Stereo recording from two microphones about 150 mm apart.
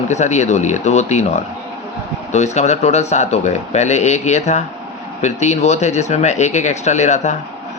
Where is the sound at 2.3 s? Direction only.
50° left (ahead or behind).